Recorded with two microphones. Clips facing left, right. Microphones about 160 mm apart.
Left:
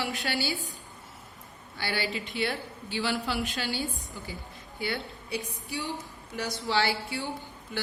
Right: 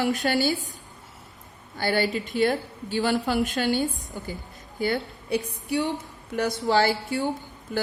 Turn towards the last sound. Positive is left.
turn(degrees=-45)  # may be behind; listen again after turning